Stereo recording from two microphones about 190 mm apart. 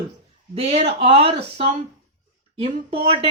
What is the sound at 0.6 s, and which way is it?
Speech, 30° right (ahead or behind).